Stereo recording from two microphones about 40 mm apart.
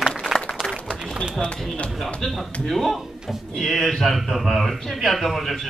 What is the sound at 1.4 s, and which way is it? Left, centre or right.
Speech, left.